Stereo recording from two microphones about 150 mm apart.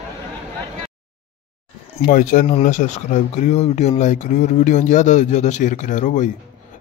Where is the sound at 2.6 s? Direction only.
55° left (ahead or behind).